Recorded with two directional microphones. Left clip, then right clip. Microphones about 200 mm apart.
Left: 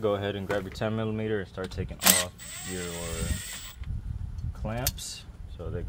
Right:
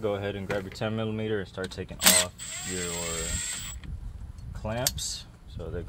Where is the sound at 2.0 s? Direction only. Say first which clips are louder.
Right 2 dB; centre (ahead or behind).